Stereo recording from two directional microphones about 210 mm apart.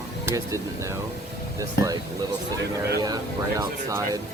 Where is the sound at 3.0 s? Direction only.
15° right (ahead or behind).